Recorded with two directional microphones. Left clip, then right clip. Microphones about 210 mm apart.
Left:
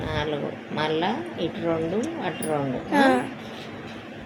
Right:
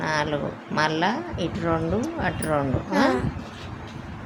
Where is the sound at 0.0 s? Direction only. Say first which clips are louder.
Right 3 dB; 45° right (ahead or behind).